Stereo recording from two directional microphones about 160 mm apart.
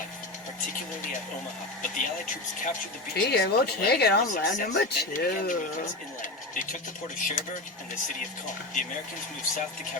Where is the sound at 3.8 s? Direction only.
85° left.